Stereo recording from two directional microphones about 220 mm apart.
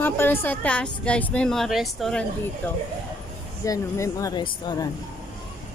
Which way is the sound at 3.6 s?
15° left (ahead or behind).